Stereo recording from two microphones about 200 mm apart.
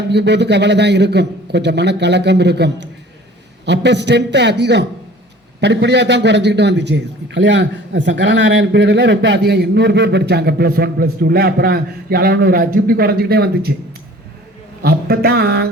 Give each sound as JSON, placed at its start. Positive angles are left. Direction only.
{"t": 0.1, "sound": "a man's voice", "side_deg": -60}
{"t": 14.8, "sound": "speech", "side_deg": -50}